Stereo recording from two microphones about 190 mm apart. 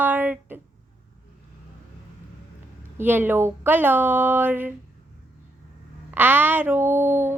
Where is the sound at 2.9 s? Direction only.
10° right (ahead or behind).